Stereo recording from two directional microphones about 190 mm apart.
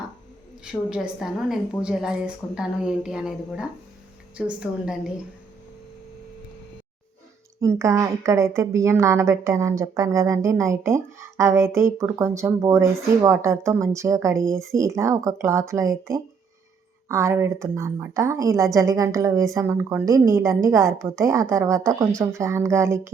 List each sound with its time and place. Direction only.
0.6 s a woman's voice: 5° right (ahead or behind)
7.6 s a woman's voice: 15° right (ahead or behind)